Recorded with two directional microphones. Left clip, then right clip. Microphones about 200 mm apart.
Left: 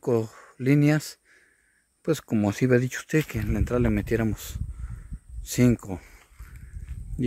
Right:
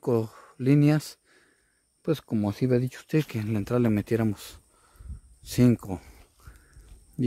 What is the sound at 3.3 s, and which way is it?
Speech, 5° right (ahead or behind).